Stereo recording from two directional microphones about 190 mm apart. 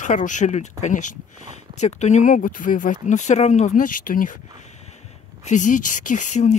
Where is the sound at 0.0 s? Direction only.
40° left (ahead or behind).